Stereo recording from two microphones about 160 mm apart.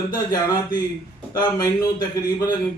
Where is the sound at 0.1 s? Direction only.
20° left (ahead or behind).